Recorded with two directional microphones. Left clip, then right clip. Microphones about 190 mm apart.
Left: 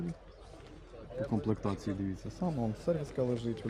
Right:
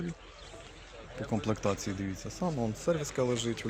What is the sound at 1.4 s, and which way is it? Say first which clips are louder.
Speech: right 4 dB; 20° right (ahead or behind).